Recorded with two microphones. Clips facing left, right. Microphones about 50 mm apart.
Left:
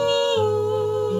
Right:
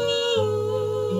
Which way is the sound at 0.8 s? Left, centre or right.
Centre.